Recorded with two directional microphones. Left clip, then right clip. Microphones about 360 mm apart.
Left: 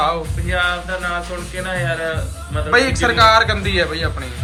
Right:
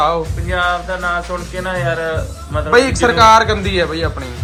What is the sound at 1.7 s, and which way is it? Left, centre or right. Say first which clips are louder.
A man's voice: right 3 dB; right.